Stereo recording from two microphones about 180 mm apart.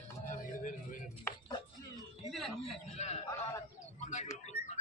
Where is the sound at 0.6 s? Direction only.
45° left (ahead or behind).